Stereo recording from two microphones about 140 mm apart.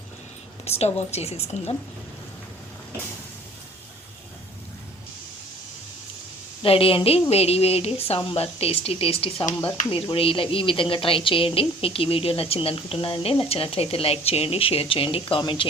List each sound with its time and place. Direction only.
0.6 s a woman's voice: 50° left (ahead or behind)
6.6 s a woman's voice: 40° left (ahead or behind)